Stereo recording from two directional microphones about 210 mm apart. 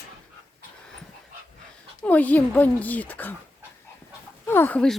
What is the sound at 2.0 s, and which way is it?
Speech, 5° left (ahead or behind).